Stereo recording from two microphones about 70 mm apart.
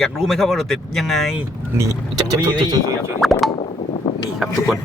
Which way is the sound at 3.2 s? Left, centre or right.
Centre.